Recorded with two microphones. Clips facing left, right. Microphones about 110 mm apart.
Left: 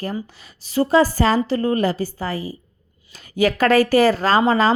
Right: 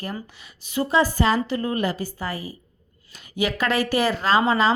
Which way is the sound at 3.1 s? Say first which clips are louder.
Left 6 dB; 40° left (ahead or behind).